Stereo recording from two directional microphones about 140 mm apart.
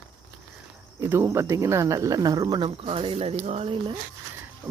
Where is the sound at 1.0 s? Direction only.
20° right (ahead or behind); by 4.0 s 40° right (ahead or behind).